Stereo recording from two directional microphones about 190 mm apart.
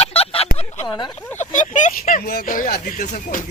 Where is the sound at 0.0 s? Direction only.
30° left (ahead or behind).